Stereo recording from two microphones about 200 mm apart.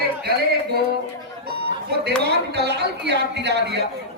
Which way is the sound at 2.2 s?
55° right (ahead or behind).